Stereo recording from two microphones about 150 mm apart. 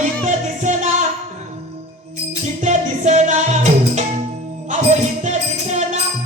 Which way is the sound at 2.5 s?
50° right (ahead or behind).